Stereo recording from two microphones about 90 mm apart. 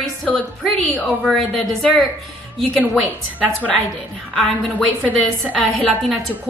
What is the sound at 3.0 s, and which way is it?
Speech, 15° left (ahead or behind).